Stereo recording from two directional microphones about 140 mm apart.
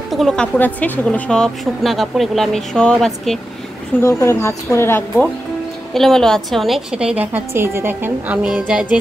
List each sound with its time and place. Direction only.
0.1 s a woman's voice: centre (ahead or behind)
4.0 s speech: 20° left (ahead or behind)
5.9 s a woman's voice: 5° left (ahead or behind)